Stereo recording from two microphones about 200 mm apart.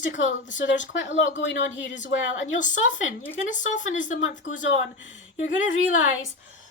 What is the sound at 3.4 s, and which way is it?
Speech, 40° left (ahead or behind).